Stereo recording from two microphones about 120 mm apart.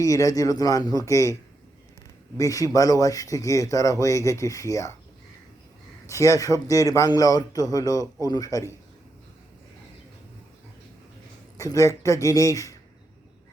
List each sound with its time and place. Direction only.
0.0 s a man's voice: 25° left (ahead or behind)
2.4 s a man's voice: 30° left (ahead or behind)
6.1 s a man's voice: 25° left (ahead or behind)
11.5 s a man's voice: 25° left (ahead or behind)